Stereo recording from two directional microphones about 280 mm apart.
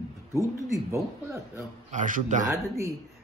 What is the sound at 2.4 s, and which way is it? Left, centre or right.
Speech, centre.